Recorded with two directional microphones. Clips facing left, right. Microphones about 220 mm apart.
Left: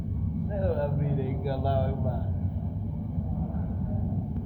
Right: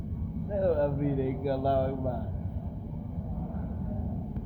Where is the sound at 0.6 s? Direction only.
50° right (ahead or behind).